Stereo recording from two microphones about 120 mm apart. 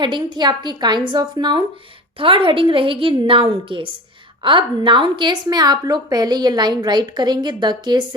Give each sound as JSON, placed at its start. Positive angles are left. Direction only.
{"t": 0.0, "sound": "a woman's voice", "side_deg": -40}